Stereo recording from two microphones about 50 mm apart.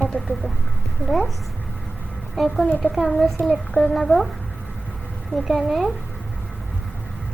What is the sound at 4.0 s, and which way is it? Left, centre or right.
Speech, centre.